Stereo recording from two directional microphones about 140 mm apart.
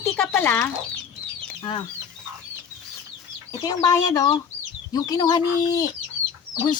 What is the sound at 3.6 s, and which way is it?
Speech, 25° left (ahead or behind).